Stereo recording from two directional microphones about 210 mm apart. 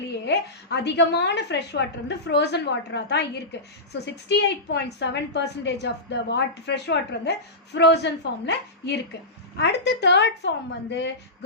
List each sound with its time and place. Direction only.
0.3 s a woman's voice: 55° left (ahead or behind)